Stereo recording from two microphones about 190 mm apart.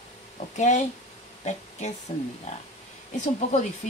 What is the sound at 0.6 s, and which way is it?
A woman's voice, 40° left (ahead or behind).